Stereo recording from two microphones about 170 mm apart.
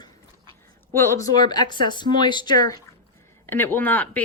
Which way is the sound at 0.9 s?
15° left (ahead or behind).